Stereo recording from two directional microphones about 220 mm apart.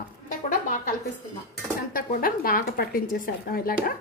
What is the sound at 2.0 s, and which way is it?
A woman's voice, 40° left (ahead or behind).